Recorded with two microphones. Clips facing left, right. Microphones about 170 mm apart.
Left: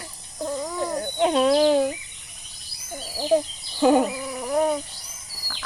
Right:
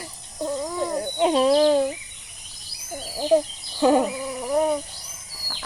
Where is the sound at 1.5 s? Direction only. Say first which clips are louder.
Even; 5° left (ahead or behind).